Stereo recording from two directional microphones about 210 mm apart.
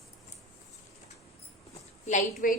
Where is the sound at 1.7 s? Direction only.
35° left (ahead or behind).